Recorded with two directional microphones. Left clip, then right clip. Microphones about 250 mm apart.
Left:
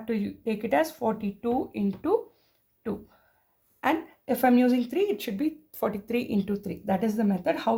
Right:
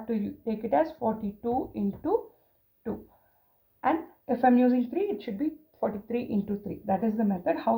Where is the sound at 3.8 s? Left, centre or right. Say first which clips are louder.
Left 1 dB; left.